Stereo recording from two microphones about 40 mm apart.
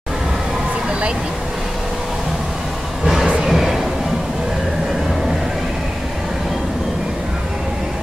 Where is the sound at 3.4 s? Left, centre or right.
Centre.